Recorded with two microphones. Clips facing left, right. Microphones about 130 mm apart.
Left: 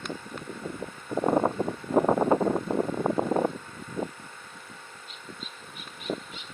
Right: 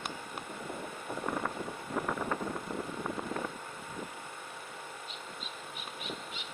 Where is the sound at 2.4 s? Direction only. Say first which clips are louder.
Left 11 dB; 70° left (ahead or behind).